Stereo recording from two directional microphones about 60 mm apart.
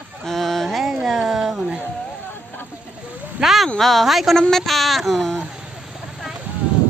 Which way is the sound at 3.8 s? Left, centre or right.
Centre.